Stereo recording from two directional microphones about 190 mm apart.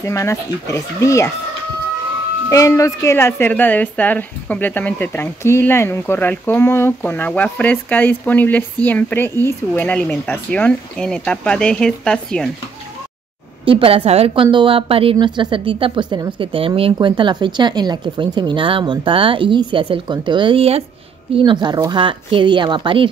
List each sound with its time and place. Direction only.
0.0 s a woman's voice: 15° left (ahead or behind)
2.5 s a woman's voice: 15° left (ahead or behind)
13.7 s a woman's voice: 30° right (ahead or behind)